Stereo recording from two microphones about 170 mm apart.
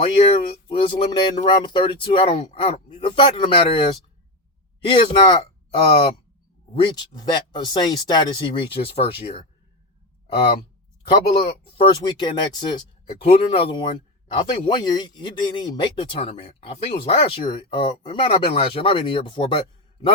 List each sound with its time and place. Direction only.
0.0 s speech: 40° left (ahead or behind)
4.9 s speech: 30° left (ahead or behind)
11.6 s speech: 30° left (ahead or behind)